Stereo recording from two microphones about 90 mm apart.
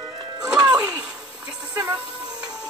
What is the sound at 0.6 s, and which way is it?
Speech, 10° right (ahead or behind).